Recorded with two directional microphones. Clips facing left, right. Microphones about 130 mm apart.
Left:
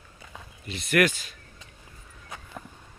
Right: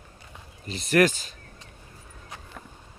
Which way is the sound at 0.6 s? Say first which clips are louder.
Right 2 dB; 35° right (ahead or behind).